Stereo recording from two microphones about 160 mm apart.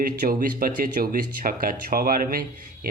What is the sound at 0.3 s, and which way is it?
Speech, 65° right (ahead or behind).